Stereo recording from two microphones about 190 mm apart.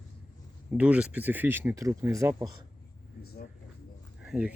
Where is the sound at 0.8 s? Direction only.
5° right (ahead or behind).